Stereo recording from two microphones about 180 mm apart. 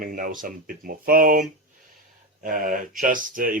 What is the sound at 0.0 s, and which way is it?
Speech, 50° right (ahead or behind).